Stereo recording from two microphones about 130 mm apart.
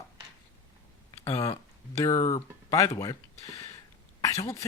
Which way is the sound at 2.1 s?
25° left (ahead or behind).